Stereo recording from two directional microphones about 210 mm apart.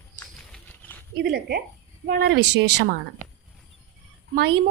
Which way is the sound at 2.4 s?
90° right.